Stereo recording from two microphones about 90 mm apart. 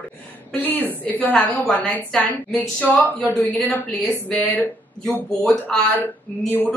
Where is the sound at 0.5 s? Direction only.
20° left (ahead or behind).